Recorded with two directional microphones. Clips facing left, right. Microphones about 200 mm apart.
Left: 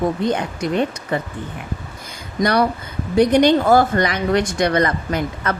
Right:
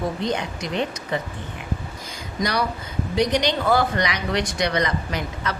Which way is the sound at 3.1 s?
55° left (ahead or behind).